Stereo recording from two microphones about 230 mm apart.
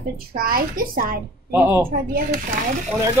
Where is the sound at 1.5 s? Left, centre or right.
Centre.